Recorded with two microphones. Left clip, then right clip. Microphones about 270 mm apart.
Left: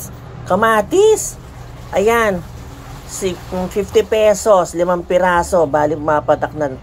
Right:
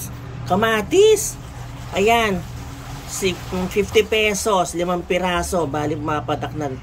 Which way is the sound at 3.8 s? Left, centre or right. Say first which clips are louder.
Left 3 dB; left.